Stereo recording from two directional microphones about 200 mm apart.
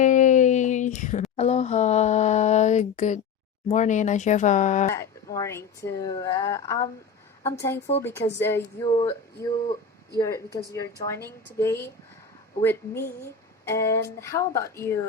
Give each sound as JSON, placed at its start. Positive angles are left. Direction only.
{"t": 0.0, "sound": "a sound", "side_deg": 40}
{"t": 3.7, "sound": "speech", "side_deg": 35}
{"t": 4.9, "sound": "speech", "side_deg": 15}
{"t": 8.0, "sound": "speech", "side_deg": 10}